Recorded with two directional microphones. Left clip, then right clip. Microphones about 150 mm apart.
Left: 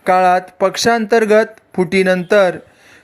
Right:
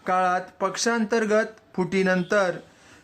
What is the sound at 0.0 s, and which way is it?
Speech, 30° left (ahead or behind).